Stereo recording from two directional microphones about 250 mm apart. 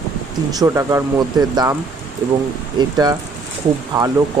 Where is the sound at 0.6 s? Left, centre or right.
Centre.